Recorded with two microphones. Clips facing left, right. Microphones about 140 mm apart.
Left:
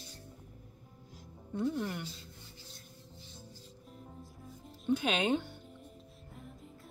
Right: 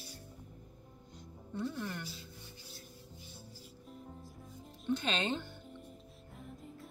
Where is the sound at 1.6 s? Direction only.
20° left (ahead or behind).